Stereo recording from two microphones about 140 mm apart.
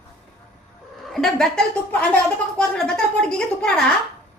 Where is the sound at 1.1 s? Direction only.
Centre (ahead or behind).